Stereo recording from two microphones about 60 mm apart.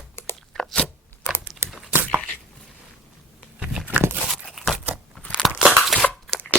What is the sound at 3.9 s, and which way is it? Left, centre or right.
Dog, right.